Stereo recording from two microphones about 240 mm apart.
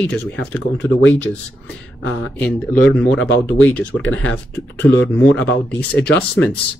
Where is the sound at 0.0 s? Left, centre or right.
Centre.